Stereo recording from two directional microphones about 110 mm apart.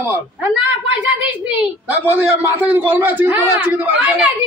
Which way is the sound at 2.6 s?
15° right (ahead or behind).